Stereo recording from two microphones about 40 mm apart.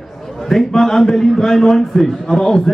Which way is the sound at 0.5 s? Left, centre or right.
Centre.